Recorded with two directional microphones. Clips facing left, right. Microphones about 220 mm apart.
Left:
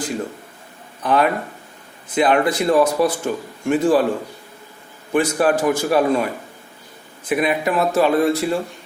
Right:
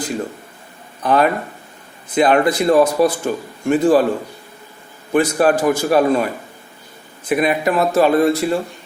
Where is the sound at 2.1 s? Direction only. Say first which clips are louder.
Right 3 dB; 40° right (ahead or behind).